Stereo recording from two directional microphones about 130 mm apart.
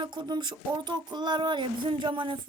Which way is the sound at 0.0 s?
35° right (ahead or behind).